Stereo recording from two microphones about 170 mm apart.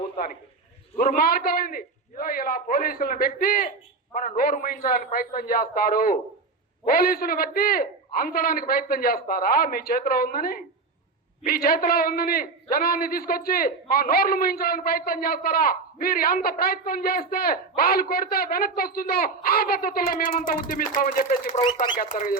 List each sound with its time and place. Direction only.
0.9 s a man's voice: 60° left (ahead or behind)